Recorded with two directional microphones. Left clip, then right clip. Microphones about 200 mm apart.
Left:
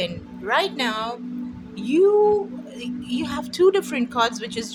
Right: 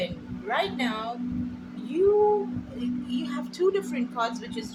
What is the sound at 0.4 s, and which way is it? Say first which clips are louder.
Speech: left 6 dB; 50° left (ahead or behind).